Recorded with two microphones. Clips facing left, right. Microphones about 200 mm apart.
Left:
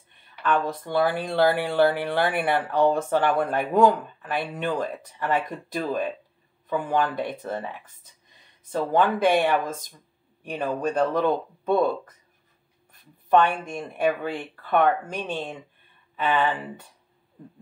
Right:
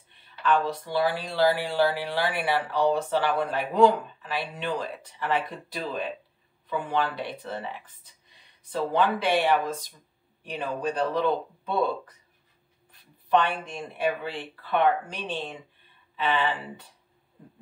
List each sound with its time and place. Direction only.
0.4 s speech: 50° left (ahead or behind)
12.9 s speech: 50° left (ahead or behind)